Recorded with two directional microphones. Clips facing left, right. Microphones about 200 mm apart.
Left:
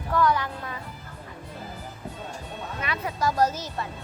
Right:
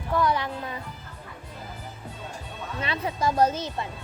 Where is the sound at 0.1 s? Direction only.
15° right (ahead or behind).